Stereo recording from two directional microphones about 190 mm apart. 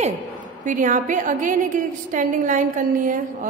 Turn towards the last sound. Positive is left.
turn(degrees=-45)  # may be behind; listen again after turning